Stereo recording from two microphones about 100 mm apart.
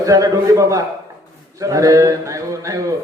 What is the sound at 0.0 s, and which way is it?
A man's voice, 35° right (ahead or behind).